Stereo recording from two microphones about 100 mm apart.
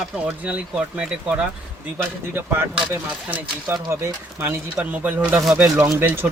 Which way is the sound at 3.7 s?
30° right (ahead or behind).